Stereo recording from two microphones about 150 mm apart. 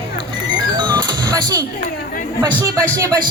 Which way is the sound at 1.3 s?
25° right (ahead or behind).